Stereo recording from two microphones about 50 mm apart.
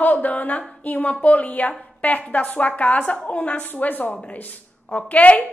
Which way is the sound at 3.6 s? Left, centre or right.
Left.